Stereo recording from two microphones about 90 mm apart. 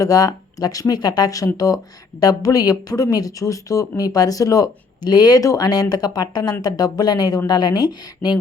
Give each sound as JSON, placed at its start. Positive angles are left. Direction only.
{"t": 0.0, "sound": "a woman's voice", "side_deg": 40}